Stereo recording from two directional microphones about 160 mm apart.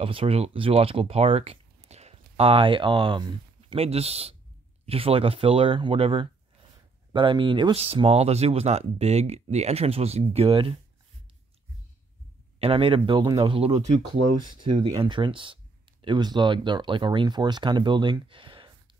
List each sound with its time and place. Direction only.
0.0 s speech: 35° right (ahead or behind)
12.5 s speech: 35° right (ahead or behind)
14.9 s speech: 30° right (ahead or behind)